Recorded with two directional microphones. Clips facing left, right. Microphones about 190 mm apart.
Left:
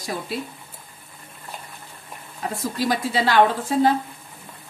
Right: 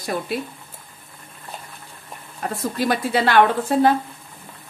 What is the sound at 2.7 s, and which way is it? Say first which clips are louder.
Speech: right 2 dB; 60° right (ahead or behind).